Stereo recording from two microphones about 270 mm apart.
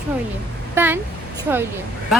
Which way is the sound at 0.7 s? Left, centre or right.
Centre.